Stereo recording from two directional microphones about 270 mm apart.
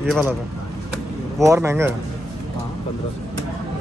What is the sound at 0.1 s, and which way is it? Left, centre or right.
Speech, centre.